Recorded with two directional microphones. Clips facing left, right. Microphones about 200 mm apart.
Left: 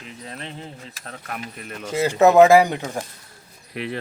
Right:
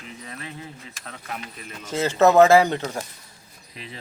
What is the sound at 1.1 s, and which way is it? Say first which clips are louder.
Speech: left 2 dB; 55° left (ahead or behind).